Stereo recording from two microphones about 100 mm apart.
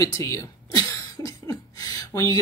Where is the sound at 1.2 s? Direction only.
40° left (ahead or behind).